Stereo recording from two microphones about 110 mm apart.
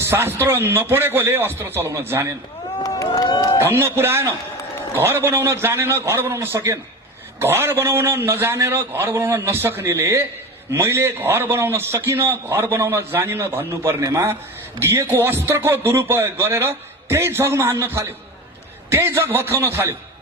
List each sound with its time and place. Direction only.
0.1 s a man's voice: 20° right (ahead or behind)
2.8 s run: 30° left (ahead or behind)
3.6 s a man's voice: 20° right (ahead or behind)